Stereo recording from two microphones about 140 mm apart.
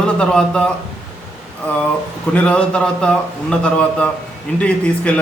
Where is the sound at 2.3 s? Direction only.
10° left (ahead or behind).